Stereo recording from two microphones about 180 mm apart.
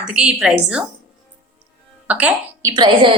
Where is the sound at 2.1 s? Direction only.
10° right (ahead or behind); by 3.2 s 25° right (ahead or behind).